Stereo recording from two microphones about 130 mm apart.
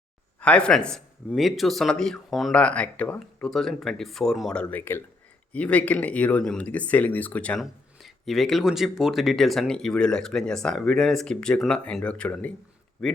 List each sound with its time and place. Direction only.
0.3 s speech: 10° left (ahead or behind)
4.7 s speech: 15° left (ahead or behind)
7.6 s speech: centre (ahead or behind)